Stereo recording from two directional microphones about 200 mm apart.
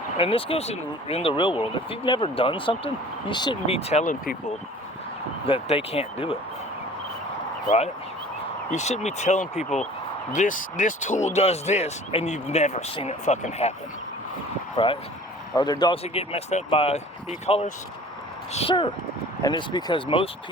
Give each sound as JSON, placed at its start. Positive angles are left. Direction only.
{"t": 0.2, "sound": "speech", "side_deg": 25}
{"t": 5.5, "sound": "speech", "side_deg": 30}
{"t": 8.7, "sound": "speech", "side_deg": 35}
{"t": 14.8, "sound": "speech", "side_deg": 20}